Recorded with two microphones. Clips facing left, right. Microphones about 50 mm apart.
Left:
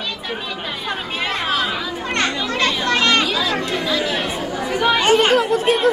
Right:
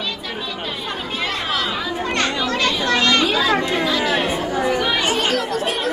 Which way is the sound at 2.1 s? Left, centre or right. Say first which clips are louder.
Left 1 dB; left.